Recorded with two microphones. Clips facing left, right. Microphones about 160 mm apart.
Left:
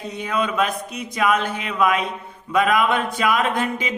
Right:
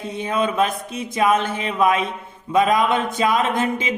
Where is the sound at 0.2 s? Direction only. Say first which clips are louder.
Right 2 dB; 25° right (ahead or behind).